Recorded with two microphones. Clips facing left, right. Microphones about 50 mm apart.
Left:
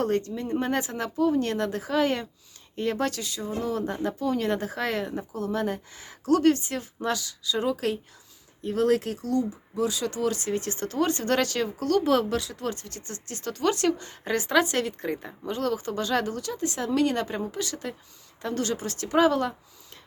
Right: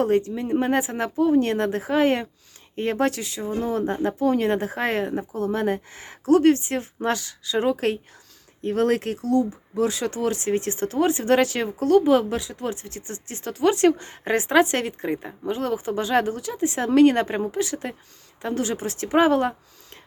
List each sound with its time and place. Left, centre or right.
0.0 s speech: centre
11.6 s speech: right
11.9 s speech: centre
13.8 s speech: right
14.9 s speech: centre
16.8 s speech: right
17.5 s a woman's voice: right